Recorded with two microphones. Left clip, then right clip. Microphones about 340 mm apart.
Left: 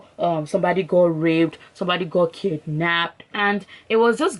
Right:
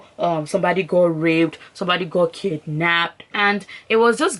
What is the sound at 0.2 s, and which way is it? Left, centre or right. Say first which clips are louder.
Speech: right 1 dB; centre.